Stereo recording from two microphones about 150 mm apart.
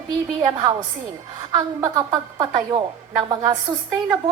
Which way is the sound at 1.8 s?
25° right (ahead or behind).